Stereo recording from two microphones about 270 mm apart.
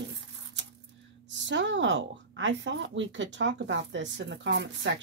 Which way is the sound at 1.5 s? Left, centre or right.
Right.